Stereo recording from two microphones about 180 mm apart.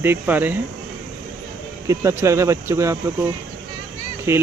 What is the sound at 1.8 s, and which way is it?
Speech, 15° right (ahead or behind).